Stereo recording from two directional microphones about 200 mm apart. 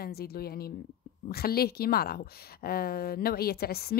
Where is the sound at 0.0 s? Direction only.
50° left (ahead or behind).